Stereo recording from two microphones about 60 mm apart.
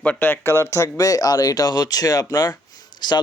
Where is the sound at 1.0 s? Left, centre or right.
Left.